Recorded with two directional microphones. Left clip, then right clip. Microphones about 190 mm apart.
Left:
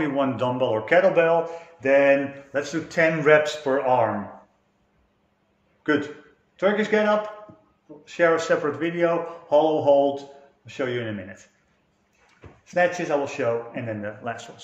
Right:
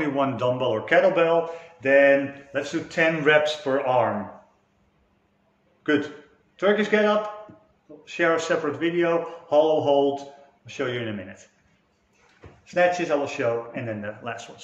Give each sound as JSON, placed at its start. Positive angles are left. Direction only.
{"t": 0.0, "sound": "a man's voice", "side_deg": 25}
{"t": 6.5, "sound": "a man's voice", "side_deg": 35}
{"t": 8.0, "sound": "a man's voice", "side_deg": 35}
{"t": 12.6, "sound": "a man's voice", "side_deg": 35}